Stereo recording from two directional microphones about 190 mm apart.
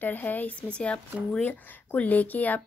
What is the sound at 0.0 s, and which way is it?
Speech, 10° left (ahead or behind).